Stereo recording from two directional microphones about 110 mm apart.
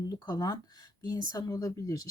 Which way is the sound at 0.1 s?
35° left (ahead or behind).